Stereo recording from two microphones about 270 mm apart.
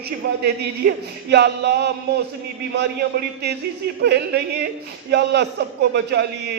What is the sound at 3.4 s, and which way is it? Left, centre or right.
A man's voice, right.